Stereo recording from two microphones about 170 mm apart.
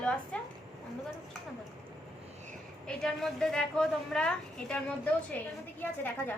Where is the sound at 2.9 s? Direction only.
5° left (ahead or behind).